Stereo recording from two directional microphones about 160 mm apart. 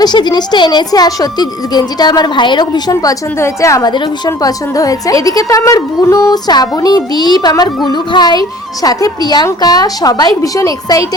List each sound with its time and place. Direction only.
0.0 s speech: 25° left (ahead or behind)